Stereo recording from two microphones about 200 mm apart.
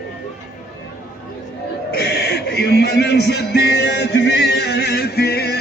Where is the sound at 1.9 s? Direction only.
50° left (ahead or behind).